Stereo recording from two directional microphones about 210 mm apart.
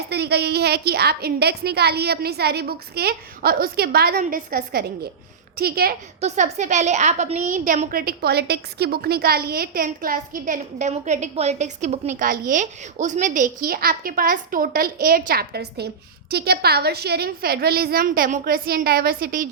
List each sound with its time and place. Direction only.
0.1 s a woman's voice: 50° right (ahead or behind)
6.1 s a woman's voice: 35° right (ahead or behind)